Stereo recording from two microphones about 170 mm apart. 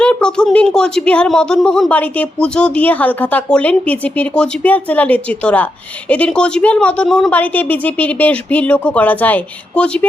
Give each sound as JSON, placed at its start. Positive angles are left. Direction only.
{"t": 0.0, "sound": "a woman's voice", "side_deg": 5}